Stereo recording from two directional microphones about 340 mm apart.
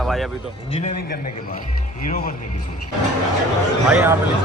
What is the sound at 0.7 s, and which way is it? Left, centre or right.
Speech, left.